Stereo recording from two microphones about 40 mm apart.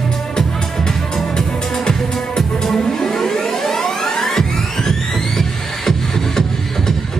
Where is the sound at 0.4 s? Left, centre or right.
Centre.